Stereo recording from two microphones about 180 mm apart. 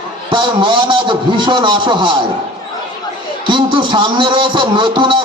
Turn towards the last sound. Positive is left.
turn(degrees=-25)  # may be behind; listen again after turning